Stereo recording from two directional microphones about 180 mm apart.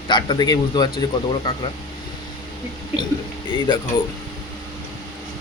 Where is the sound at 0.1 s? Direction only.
25° left (ahead or behind).